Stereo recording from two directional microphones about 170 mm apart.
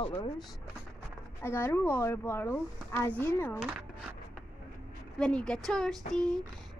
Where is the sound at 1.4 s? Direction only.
15° left (ahead or behind).